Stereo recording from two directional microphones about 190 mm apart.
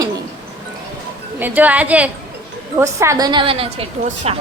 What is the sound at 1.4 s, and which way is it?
A woman's voice, 10° right (ahead or behind).